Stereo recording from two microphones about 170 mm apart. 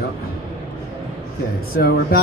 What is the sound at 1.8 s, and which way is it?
Speech, 65° left (ahead or behind).